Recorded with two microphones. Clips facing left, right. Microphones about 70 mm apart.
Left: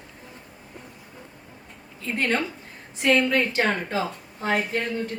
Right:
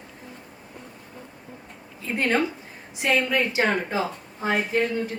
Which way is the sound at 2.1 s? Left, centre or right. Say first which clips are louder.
Right 2 dB; centre.